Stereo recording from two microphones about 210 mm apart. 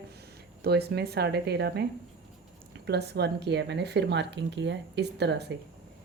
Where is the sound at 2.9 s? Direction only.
50° right (ahead or behind).